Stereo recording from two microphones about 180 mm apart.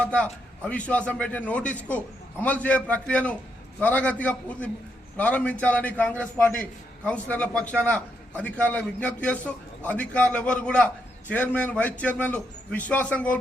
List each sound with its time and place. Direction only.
0.0 s a man's voice: 5° left (ahead or behind)